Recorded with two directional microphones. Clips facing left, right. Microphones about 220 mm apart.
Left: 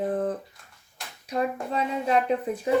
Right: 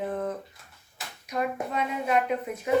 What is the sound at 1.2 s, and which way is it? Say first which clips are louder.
Hands: left 3 dB; 30° left (ahead or behind).